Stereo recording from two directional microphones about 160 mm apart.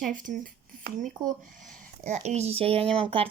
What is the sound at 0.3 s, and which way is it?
Speech, 55° right (ahead or behind).